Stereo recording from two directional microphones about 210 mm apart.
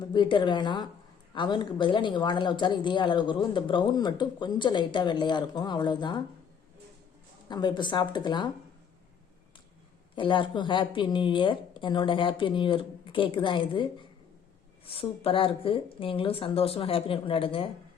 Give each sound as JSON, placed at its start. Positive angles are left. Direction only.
{"t": 0.1, "sound": "speech", "side_deg": 20}
{"t": 7.4, "sound": "speech", "side_deg": 20}
{"t": 10.2, "sound": "speech", "side_deg": 25}